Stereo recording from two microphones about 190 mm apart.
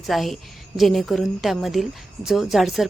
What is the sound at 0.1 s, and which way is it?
A woman's voice, centre (ahead or behind).